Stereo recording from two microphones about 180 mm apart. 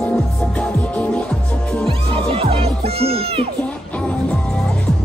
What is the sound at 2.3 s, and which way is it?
Music, 30° right (ahead or behind).